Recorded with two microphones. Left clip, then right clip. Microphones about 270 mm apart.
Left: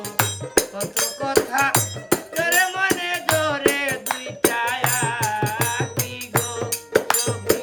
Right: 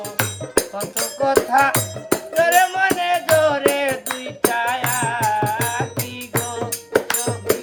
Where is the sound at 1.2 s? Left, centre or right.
Centre.